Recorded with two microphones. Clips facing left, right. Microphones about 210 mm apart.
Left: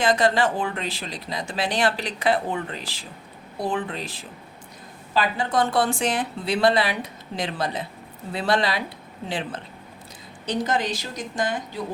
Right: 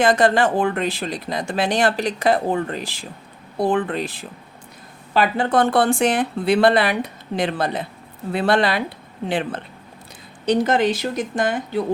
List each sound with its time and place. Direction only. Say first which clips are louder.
0.0 s speech: right 4 dB; 55° right (ahead or behind)
10.4 s speech: right 7 dB; 65° right (ahead or behind)